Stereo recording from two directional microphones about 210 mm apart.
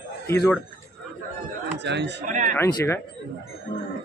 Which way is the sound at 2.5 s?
10° left (ahead or behind).